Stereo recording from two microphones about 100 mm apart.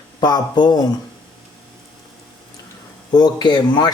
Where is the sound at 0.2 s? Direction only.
45° left (ahead or behind).